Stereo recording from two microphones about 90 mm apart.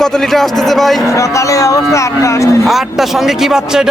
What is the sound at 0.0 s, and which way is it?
A man's voice, 5° left (ahead or behind).